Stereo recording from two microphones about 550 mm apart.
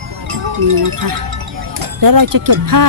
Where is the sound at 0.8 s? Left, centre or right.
Right.